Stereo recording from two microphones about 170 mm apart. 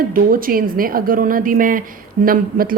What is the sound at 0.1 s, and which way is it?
Speech, 55° right (ahead or behind).